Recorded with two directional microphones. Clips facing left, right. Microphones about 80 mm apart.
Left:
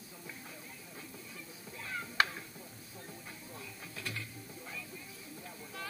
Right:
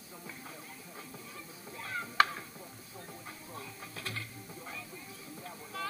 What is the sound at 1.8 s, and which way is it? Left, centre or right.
Music, right.